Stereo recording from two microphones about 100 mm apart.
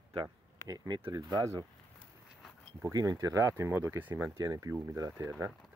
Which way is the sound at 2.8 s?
35° right (ahead or behind).